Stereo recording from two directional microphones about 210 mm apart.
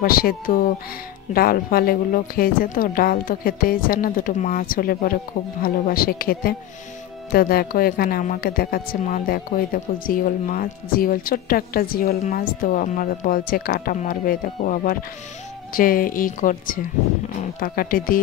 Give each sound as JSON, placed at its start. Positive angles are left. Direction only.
{"t": 0.0, "sound": "a woman's voice", "side_deg": 45}